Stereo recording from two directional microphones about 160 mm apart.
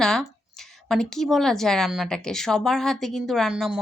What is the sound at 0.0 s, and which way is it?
Speech, centre (ahead or behind).